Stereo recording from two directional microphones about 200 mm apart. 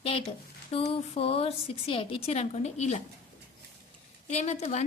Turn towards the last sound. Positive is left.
turn(degrees=35)  # may be behind; listen again after turning